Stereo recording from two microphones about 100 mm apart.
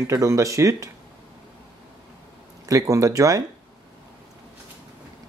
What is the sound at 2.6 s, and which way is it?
Speech, 35° right (ahead or behind).